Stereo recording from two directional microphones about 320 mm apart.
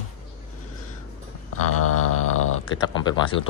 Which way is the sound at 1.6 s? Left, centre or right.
Left.